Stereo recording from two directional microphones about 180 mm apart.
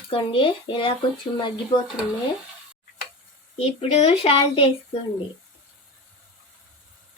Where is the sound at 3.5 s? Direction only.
35° left (ahead or behind).